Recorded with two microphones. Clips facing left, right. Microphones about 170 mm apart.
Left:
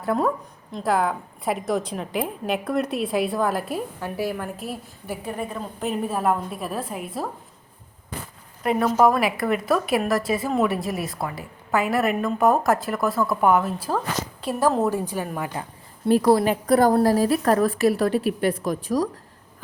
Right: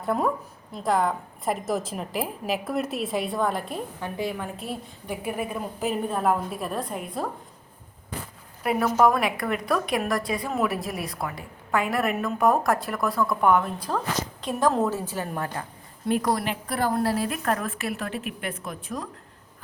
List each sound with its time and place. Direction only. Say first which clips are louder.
0.0 s a woman's voice: left 2 dB; centre (ahead or behind)
5.2 s a woman's voice: right 1 dB; 10° right (ahead or behind)
8.6 s a woman's voice: left 2 dB; centre (ahead or behind)
16.0 s a woman's voice: left 7 dB; 35° left (ahead or behind)